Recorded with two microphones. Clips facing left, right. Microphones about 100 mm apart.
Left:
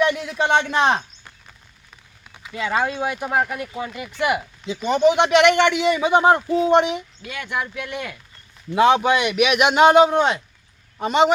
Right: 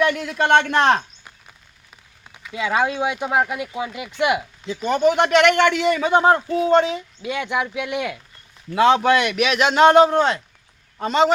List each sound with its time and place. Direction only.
0.0 s a man's voice: 5° left (ahead or behind)
2.5 s speech: 10° right (ahead or behind)
4.6 s a man's voice: 15° left (ahead or behind)
7.2 s speech: 20° right (ahead or behind)
8.7 s a man's voice: 20° left (ahead or behind)